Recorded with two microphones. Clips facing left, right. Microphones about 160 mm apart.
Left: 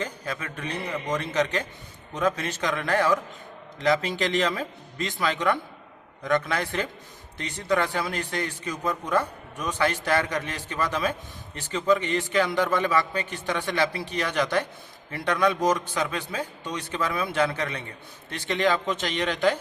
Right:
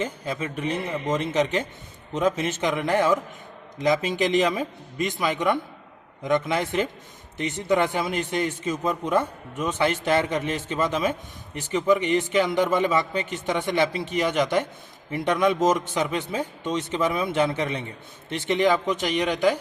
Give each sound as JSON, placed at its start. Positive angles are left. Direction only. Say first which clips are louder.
{"t": 0.0, "sound": "a man's voice", "louder": "right 4 dB", "side_deg": -20}